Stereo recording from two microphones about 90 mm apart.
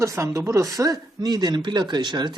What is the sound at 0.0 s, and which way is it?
Speech, 35° right (ahead or behind).